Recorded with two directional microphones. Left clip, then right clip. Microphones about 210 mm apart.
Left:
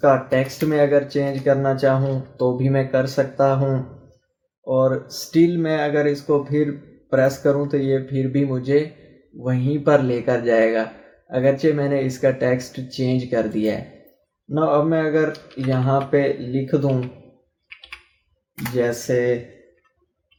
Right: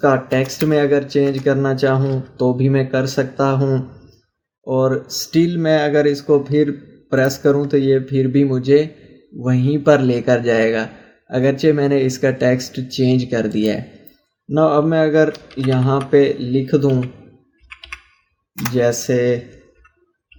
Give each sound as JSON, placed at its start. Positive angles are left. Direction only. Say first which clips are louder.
{"t": 0.0, "sound": "speech", "louder": "right 1 dB", "side_deg": -45}
{"t": 17.7, "sound": "computer keyboard", "louder": "right 5 dB", "side_deg": -45}
{"t": 18.5, "sound": "speech", "louder": "right 5 dB", "side_deg": -45}